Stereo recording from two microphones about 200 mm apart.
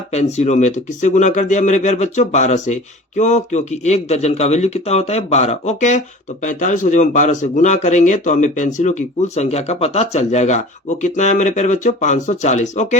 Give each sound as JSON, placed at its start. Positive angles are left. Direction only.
{"t": 0.1, "sound": "speech", "side_deg": 35}